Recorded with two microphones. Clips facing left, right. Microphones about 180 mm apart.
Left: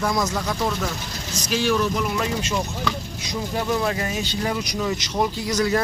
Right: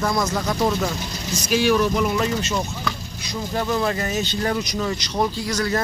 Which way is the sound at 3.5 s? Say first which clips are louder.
Right 1 dB; 5° left (ahead or behind).